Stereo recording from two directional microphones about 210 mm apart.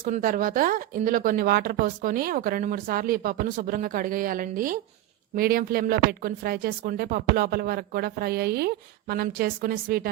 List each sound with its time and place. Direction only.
0.0 s speech: 40° right (ahead or behind)